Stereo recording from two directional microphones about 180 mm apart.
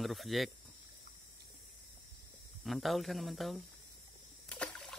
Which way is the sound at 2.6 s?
Centre (ahead or behind).